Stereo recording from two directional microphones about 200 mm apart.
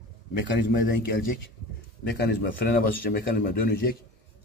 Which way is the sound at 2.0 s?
60° left (ahead or behind).